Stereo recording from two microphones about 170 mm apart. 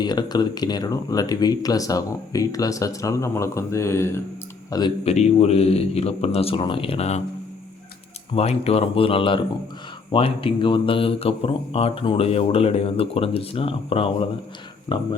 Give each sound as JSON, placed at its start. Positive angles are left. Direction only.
{"t": 0.0, "sound": "speech", "side_deg": 25}
{"t": 5.0, "sound": "speech", "side_deg": 40}
{"t": 8.3, "sound": "speech", "side_deg": 35}